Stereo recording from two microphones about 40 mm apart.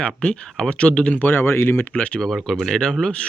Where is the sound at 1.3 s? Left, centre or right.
Left.